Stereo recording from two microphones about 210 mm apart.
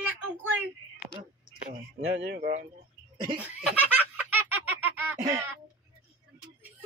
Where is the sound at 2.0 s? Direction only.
50° right (ahead or behind).